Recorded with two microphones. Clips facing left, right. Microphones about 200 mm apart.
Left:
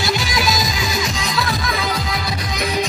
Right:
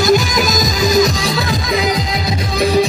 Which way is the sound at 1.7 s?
20° right (ahead or behind).